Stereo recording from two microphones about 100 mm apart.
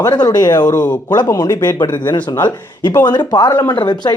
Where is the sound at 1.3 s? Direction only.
35° left (ahead or behind).